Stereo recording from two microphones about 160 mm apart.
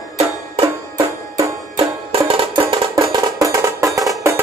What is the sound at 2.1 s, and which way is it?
Music, 35° right (ahead or behind).